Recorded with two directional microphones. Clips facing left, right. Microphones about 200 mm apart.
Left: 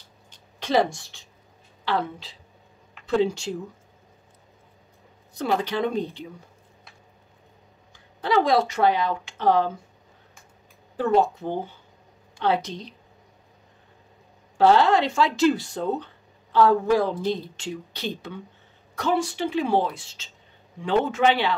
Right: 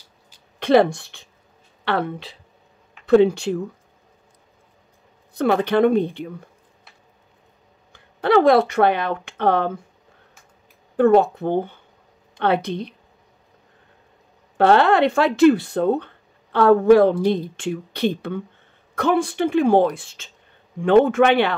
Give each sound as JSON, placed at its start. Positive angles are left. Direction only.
{"t": 0.6, "sound": "speech", "side_deg": -60}
{"t": 5.3, "sound": "speech", "side_deg": -60}
{"t": 7.9, "sound": "speech", "side_deg": -60}
{"t": 11.0, "sound": "speech", "side_deg": -60}
{"t": 14.6, "sound": "a woman's voice", "side_deg": -60}